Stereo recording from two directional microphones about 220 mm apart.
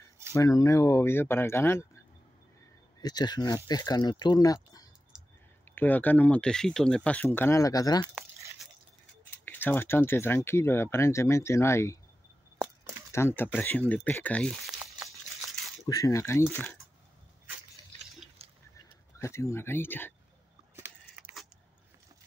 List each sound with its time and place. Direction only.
0.3 s speech: 15° left (ahead or behind)
3.0 s speech: 20° left (ahead or behind)
9.4 s speech: 10° left (ahead or behind)
13.2 s speech: 10° left (ahead or behind)
15.8 s speech: 15° left (ahead or behind)
18.4 s a sound: 25° right (ahead or behind)
19.1 s speech: 15° left (ahead or behind)
20.7 s keys jangling: 10° right (ahead or behind)